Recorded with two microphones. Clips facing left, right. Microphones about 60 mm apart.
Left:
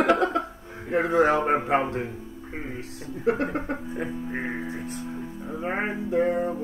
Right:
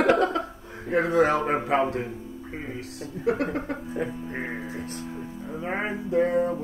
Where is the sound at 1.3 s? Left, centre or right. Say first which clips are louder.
Left 2 dB; left.